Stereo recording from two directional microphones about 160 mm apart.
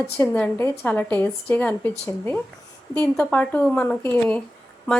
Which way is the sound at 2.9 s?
10° left (ahead or behind).